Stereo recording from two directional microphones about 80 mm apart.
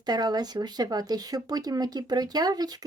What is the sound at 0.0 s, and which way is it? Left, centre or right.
Speech, right.